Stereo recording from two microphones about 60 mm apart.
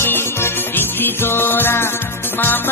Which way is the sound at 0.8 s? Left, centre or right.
Left.